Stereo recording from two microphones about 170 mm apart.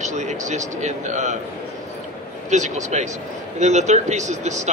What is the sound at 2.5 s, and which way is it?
Speech, 45° right (ahead or behind).